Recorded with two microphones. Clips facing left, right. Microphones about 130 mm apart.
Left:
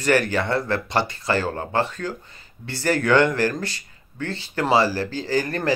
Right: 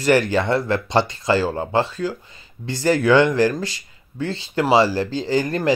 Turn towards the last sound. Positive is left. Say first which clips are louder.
# right 3 dB
turn(degrees=-20)  # may be behind; listen again after turning